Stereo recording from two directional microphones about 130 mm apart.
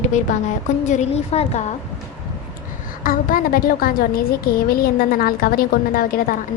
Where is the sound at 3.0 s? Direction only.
90° left.